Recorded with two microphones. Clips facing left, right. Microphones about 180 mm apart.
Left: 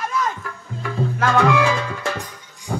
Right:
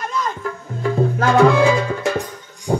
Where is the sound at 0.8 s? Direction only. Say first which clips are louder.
Right 5 dB; 35° right (ahead or behind).